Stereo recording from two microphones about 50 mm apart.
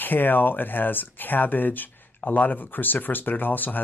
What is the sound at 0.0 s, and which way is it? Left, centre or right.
Speech, left.